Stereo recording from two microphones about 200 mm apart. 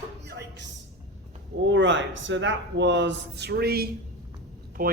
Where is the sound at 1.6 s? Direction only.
65° right (ahead or behind); by 4.9 s 50° right (ahead or behind).